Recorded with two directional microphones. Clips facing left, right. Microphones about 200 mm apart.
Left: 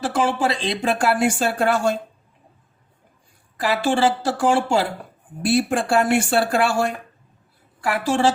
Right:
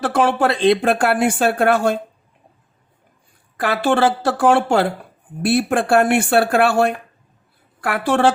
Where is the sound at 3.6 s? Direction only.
60° right (ahead or behind).